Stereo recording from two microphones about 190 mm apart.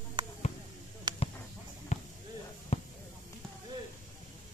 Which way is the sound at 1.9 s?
35° left (ahead or behind).